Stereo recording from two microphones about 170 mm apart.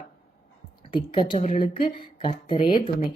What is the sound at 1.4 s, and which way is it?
Speech, 45° left (ahead or behind).